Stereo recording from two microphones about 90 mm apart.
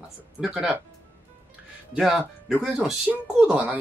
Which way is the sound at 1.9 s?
10° right (ahead or behind).